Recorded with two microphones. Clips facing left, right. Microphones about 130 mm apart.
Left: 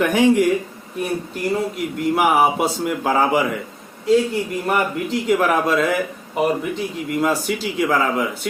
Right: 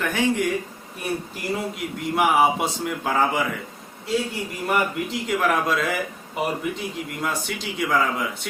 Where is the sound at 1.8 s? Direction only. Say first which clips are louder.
Left 2 dB; centre (ahead or behind).